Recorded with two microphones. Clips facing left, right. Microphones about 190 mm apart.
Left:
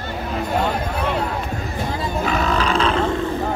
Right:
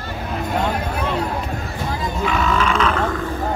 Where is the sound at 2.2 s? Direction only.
40° left (ahead or behind).